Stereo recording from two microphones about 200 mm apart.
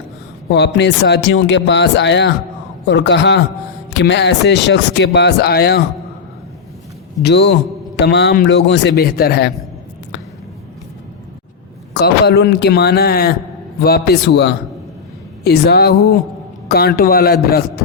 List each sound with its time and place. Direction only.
0.5 s a man's voice: 60° left (ahead or behind)
7.2 s a man's voice: 55° left (ahead or behind)
11.9 s a man's voice: 55° left (ahead or behind)